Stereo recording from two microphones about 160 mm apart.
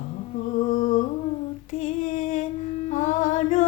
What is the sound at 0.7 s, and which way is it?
Humming, 55° left (ahead or behind).